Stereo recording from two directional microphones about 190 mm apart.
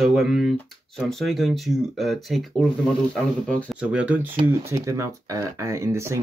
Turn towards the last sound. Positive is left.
turn(degrees=-15)  # may be behind; listen again after turning